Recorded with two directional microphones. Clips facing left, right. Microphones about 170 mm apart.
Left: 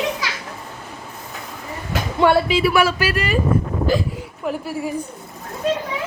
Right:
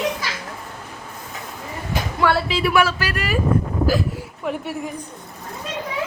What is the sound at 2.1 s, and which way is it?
A man's voice, 20° left (ahead or behind).